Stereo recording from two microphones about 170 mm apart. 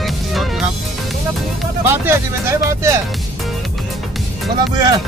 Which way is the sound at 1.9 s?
15° right (ahead or behind).